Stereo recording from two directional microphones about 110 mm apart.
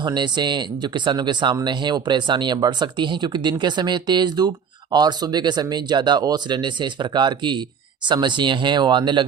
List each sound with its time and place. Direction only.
0.0 s speech: 45° right (ahead or behind)